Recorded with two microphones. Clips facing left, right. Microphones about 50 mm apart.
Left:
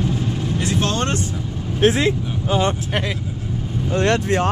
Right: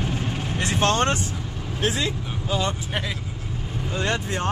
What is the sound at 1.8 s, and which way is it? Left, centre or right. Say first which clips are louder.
Speech: left 9 dB; left.